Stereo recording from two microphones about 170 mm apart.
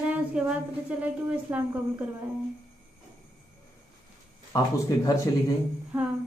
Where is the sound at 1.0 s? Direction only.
10° right (ahead or behind).